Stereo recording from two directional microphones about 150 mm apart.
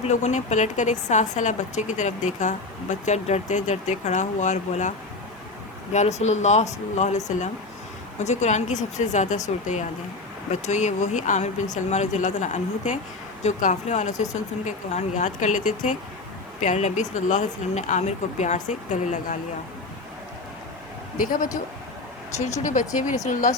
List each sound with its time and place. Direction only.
0.0 s a woman's voice: 50° left (ahead or behind)
22.6 s speech: 55° left (ahead or behind)